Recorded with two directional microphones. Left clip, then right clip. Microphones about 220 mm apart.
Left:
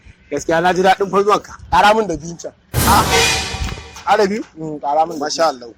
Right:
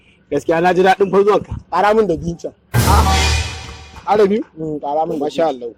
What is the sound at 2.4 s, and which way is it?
Music, centre (ahead or behind).